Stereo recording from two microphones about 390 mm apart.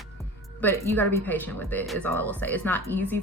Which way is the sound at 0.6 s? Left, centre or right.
Centre.